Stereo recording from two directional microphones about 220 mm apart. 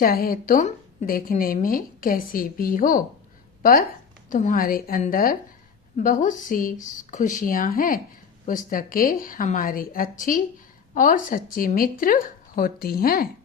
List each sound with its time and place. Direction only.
0.0 s a woman's voice: 40° left (ahead or behind)